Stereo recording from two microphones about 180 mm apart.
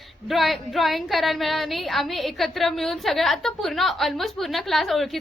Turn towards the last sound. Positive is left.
turn(degrees=0)  # may be behind; listen again after turning